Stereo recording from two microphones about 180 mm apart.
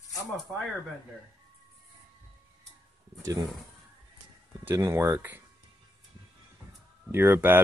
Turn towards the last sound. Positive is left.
turn(degrees=-10)  # may be behind; listen again after turning